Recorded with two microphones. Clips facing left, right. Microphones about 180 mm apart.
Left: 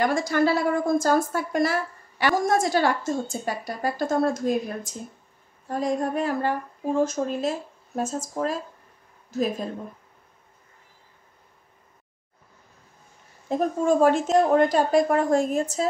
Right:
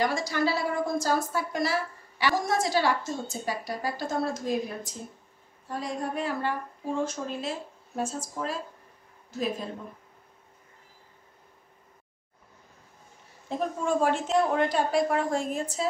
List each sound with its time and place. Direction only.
0.0 s a woman's voice: 50° left (ahead or behind)
13.5 s a woman's voice: 45° left (ahead or behind)